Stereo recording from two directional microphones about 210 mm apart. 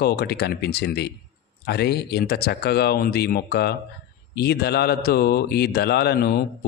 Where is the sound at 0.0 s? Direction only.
50° left (ahead or behind).